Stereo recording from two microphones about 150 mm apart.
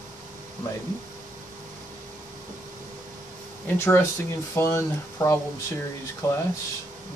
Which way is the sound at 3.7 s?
15° left (ahead or behind).